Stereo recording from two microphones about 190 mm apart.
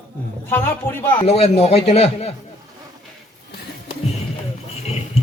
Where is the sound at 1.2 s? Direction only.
30° left (ahead or behind).